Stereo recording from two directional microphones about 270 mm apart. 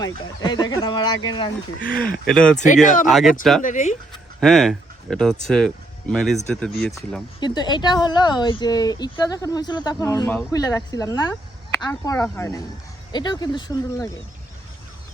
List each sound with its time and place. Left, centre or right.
0.4 s speech: centre
1.8 s speech: centre
2.8 s speech: left
3.1 s speech: centre
3.6 s speech: left
4.1 s a sound: centre
5.5 s speech: centre